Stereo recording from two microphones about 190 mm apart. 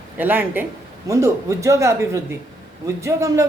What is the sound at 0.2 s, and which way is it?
A man's voice, 10° right (ahead or behind).